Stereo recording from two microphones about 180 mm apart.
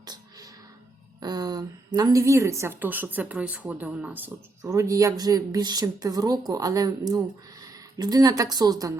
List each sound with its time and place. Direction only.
0.0 s music: 20° right (ahead or behind)
1.2 s a woman's voice: 20° right (ahead or behind)